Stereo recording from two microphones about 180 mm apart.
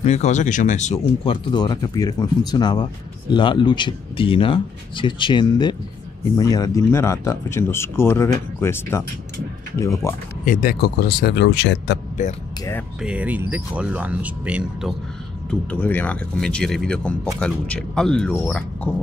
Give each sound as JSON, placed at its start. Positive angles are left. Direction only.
{"t": 0.0, "sound": "speech", "side_deg": 40}
{"t": 10.4, "sound": "speech", "side_deg": 50}
{"t": 13.0, "sound": "speech", "side_deg": -5}
{"t": 15.7, "sound": "speech", "side_deg": 10}